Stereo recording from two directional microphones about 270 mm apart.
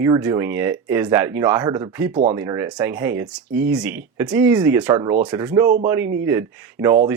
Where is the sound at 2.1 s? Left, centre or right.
Right.